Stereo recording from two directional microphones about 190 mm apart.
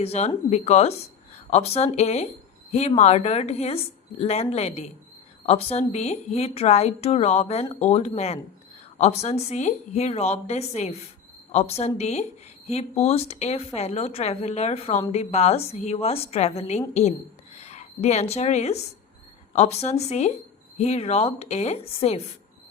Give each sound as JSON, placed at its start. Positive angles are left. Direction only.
{"t": 0.0, "sound": "a woman's voice", "side_deg": 35}